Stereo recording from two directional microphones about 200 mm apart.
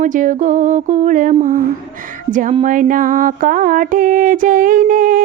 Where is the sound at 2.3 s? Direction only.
35° right (ahead or behind).